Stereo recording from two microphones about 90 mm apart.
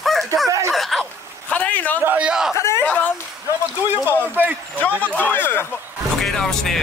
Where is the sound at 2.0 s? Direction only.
20° right (ahead or behind).